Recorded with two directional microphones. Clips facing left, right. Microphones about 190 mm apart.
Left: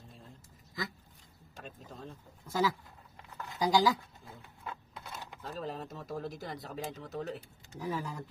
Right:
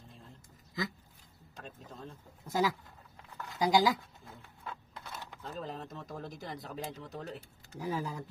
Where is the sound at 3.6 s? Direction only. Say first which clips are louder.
Right 1 dB; 15° right (ahead or behind).